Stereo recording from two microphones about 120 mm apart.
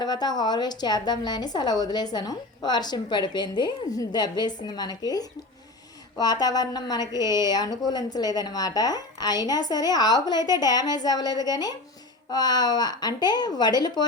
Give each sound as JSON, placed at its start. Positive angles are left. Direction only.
{"t": 0.0, "sound": "a woman's voice", "side_deg": 35}